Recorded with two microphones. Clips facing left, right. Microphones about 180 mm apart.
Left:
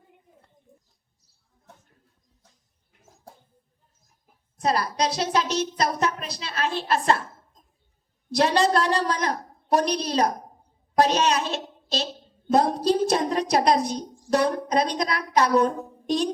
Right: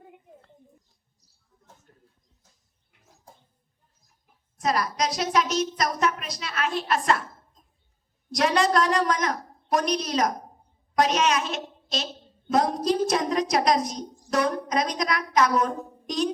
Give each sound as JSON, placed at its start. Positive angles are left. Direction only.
{"t": 1.9, "sound": "a sound", "side_deg": -45}
{"t": 4.6, "sound": "a child's voice", "side_deg": 30}
{"t": 8.3, "sound": "a child's voice", "side_deg": 30}